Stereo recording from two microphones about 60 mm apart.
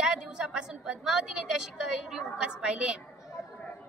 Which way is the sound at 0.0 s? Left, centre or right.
Centre.